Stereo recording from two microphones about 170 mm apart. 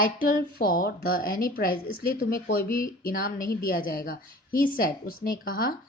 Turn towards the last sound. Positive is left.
turn(degrees=55)  # may be behind; listen again after turning